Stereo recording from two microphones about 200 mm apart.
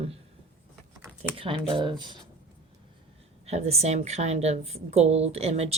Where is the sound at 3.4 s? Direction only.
35° right (ahead or behind).